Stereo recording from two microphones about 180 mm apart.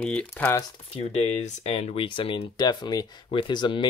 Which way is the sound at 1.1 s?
35° left (ahead or behind).